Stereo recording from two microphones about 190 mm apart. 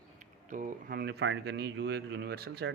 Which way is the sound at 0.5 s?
45° right (ahead or behind).